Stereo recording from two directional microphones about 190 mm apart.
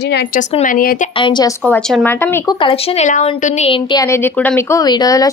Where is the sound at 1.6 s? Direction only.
5° left (ahead or behind).